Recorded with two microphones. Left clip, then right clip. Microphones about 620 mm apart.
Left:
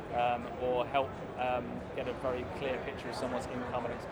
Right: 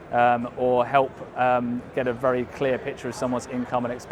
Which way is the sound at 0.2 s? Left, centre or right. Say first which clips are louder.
Right 12 dB; right.